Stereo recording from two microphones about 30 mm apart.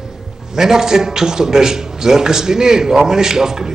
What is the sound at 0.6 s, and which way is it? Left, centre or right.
A man's voice, centre.